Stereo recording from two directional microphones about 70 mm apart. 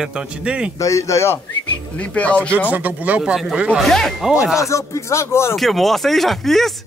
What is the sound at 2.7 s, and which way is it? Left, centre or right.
Speech, right.